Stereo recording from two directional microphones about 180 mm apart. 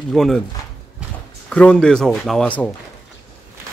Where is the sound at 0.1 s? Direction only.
Centre (ahead or behind).